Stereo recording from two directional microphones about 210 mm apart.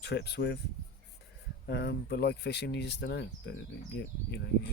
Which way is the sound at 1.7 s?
50° left (ahead or behind).